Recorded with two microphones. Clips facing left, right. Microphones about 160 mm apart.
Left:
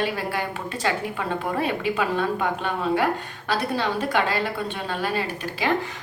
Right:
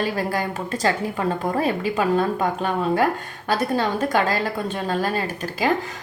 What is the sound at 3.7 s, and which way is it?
A woman's voice, 40° right (ahead or behind).